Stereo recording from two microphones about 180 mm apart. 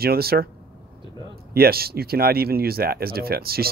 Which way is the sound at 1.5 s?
60° right (ahead or behind).